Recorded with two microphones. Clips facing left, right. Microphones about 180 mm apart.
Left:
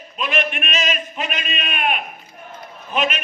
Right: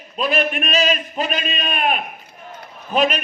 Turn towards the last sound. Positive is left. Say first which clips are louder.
# right 4 dB
turn(degrees=-35)  # may be behind; listen again after turning